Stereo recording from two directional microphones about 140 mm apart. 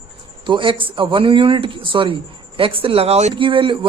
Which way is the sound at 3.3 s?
40° right (ahead or behind).